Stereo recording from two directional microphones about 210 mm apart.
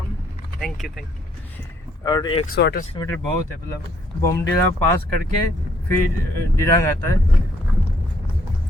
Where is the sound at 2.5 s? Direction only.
50° left (ahead or behind).